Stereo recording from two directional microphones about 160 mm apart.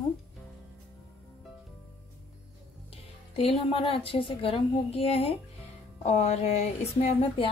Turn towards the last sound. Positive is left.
turn(degrees=40)  # may be behind; listen again after turning